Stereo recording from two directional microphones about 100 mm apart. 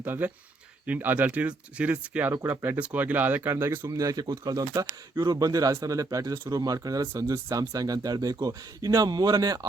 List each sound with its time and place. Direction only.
0.0 s speech: 20° right (ahead or behind)
2.3 s speech: 25° right (ahead or behind)
3.9 s speech: 40° right (ahead or behind)